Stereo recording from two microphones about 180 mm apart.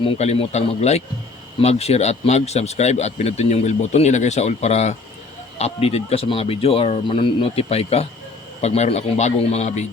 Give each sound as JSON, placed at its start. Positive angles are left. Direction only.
{"t": 0.0, "sound": "speech", "side_deg": 35}